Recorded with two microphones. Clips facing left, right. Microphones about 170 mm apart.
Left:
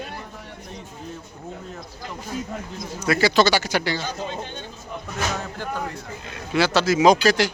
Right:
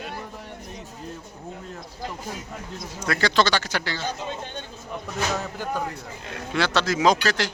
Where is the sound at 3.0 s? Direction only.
5° left (ahead or behind).